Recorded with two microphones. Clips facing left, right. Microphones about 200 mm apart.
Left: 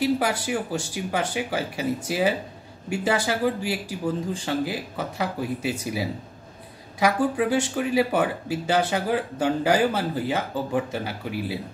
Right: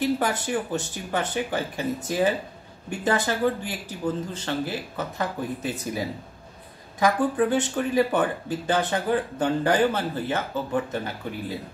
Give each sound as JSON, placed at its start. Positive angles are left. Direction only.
{"t": 0.0, "sound": "speech", "side_deg": 10}